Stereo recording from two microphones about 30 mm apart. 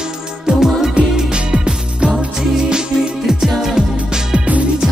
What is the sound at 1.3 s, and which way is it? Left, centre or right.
Music, right.